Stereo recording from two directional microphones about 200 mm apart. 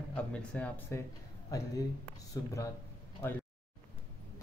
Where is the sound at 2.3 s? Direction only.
15° left (ahead or behind).